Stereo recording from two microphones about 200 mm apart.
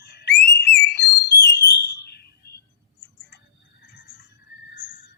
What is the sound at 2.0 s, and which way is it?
Bird, 55° left (ahead or behind).